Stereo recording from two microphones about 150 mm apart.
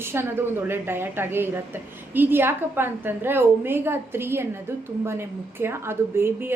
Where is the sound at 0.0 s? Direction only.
15° right (ahead or behind).